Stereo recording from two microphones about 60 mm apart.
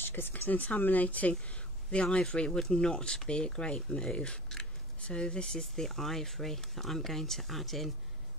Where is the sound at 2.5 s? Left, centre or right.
Centre.